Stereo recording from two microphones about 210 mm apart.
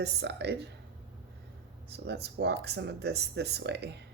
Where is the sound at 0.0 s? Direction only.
55° right (ahead or behind).